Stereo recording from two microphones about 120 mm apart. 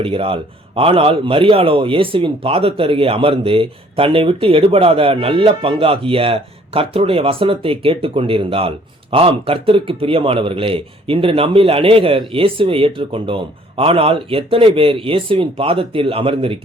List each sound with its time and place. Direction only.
0.0 s a man's voice: 50° right (ahead or behind)